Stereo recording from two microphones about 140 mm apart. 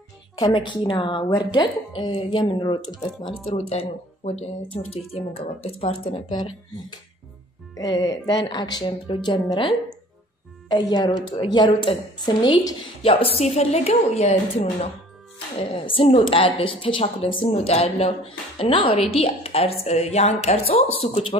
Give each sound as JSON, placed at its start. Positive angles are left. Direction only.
{"t": 0.4, "sound": "speech", "side_deg": 35}
{"t": 3.4, "sound": "speech", "side_deg": 45}
{"t": 15.7, "sound": "speech", "side_deg": 40}